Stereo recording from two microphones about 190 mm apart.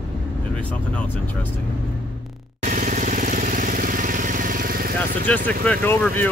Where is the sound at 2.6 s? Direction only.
40° right (ahead or behind).